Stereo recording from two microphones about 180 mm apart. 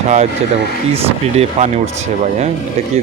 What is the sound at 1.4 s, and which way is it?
Speech, 40° right (ahead or behind).